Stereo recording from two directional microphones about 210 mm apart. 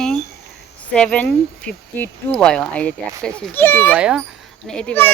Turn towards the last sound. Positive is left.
turn(degrees=5)  # may be behind; listen again after turning